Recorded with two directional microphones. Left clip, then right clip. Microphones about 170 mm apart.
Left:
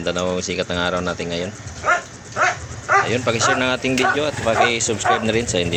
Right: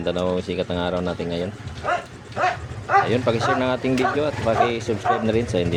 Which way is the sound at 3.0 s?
10° right (ahead or behind).